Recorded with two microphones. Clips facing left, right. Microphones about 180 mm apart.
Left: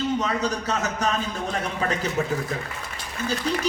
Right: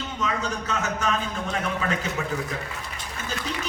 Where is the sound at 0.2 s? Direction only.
35° left (ahead or behind).